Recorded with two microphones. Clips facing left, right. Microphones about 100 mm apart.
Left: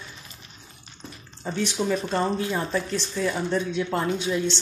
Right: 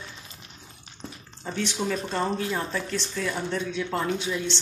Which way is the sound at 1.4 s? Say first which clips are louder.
Left 3 dB; 5° left (ahead or behind).